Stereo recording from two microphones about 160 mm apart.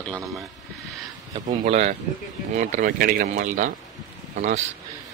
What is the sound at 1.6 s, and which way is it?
Speech, 45° right (ahead or behind).